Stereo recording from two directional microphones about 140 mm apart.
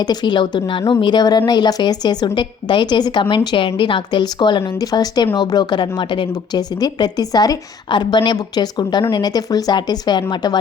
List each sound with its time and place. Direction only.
0.0 s a woman's voice: 30° left (ahead or behind)